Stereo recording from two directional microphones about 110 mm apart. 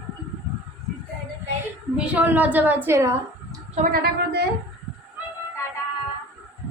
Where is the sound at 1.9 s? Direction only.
10° right (ahead or behind).